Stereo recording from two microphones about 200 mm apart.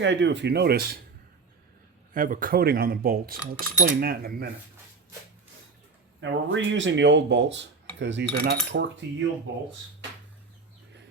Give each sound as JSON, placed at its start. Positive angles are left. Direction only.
{"t": 0.0, "sound": "speech", "side_deg": -60}
{"t": 2.1, "sound": "speech", "side_deg": -45}
{"t": 6.1, "sound": "speech", "side_deg": -65}